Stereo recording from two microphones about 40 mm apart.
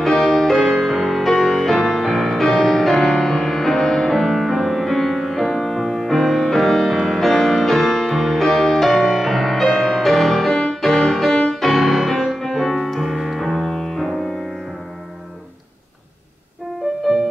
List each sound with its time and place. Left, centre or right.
0.2 s music: centre
10.5 s music: centre
11.1 s music: centre